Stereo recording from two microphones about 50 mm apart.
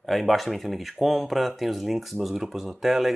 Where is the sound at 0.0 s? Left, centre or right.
Centre.